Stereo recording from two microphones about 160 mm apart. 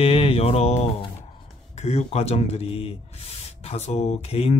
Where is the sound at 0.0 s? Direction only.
35° left (ahead or behind).